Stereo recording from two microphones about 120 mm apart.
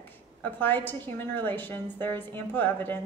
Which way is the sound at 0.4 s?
15° left (ahead or behind).